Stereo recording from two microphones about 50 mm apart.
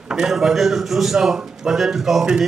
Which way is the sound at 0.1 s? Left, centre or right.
Centre.